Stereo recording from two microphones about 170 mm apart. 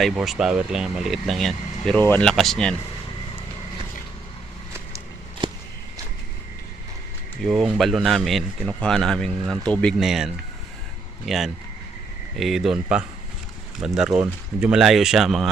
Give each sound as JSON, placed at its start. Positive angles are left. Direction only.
{"t": 0.0, "sound": "speech", "side_deg": 0}
{"t": 5.4, "sound": "a sound", "side_deg": -30}
{"t": 7.4, "sound": "speech", "side_deg": -5}